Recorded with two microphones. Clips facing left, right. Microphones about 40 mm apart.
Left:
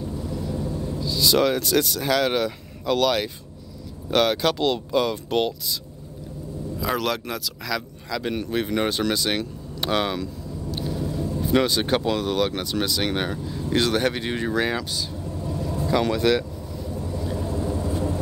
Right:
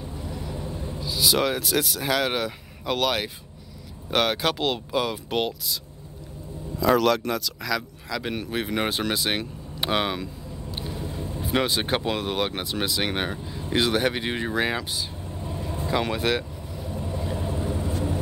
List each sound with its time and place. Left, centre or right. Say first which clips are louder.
0.3 s vehicle: left 4 dB; right
1.0 s speech: left 3 dB; centre
6.8 s speech: right 5 dB; centre
10.7 s vehicle: left 5 dB; right
11.4 s speech: left 3 dB; centre
15.2 s vehicle: left 4 dB; right
15.9 s speech: left 4 dB; centre
16.9 s vehicle: left 1 dB; right